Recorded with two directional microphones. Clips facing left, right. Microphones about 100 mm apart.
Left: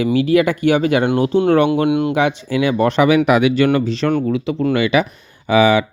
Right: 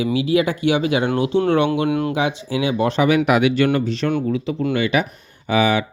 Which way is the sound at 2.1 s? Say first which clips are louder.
Left 4 dB; 60° left (ahead or behind).